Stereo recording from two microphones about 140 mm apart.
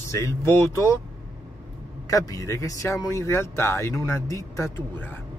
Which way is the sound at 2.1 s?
25° left (ahead or behind).